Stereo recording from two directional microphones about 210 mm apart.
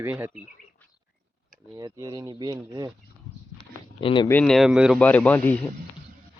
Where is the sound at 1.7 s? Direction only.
15° right (ahead or behind).